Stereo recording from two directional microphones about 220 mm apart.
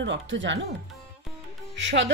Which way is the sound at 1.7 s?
55° right (ahead or behind).